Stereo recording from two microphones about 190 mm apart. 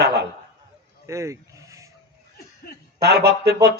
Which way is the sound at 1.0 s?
15° right (ahead or behind).